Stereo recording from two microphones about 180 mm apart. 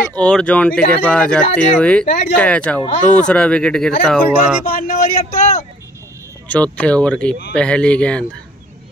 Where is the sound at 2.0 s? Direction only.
45° left (ahead or behind).